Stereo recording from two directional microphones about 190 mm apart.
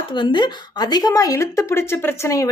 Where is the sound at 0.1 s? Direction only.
25° left (ahead or behind).